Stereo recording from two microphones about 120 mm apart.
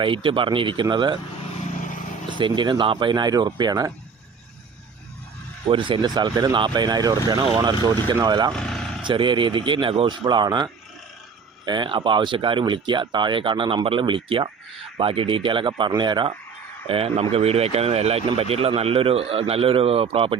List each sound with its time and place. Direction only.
0.0 s speech: 45° right (ahead or behind)
1.8 s vehicle: 90° left
2.4 s speech: 40° right (ahead or behind)
5.6 s speech: 45° right (ahead or behind)
8.5 s vehicle: 5° left (ahead or behind)
9.0 s speech: 45° right (ahead or behind)
16.8 s speech: 55° right (ahead or behind)